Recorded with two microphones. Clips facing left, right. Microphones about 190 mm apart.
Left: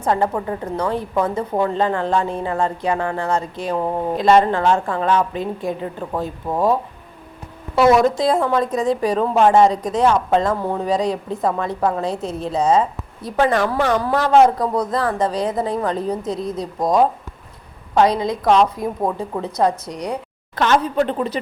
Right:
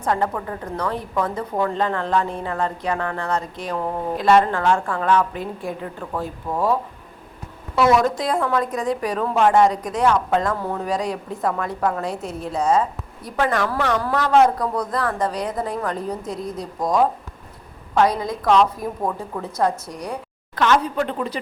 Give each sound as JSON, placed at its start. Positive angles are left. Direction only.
{"t": 0.0, "sound": "a woman's voice", "side_deg": 25}
{"t": 7.8, "sound": "a woman's voice", "side_deg": 25}
{"t": 20.6, "sound": "speech", "side_deg": 35}